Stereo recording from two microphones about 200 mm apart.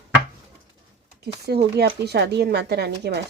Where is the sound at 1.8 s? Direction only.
55° right (ahead or behind).